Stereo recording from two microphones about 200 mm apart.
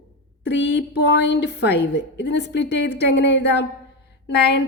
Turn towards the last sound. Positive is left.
turn(degrees=55)  # may be behind; listen again after turning